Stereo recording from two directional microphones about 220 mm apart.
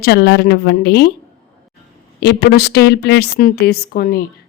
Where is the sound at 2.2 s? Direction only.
50° left (ahead or behind).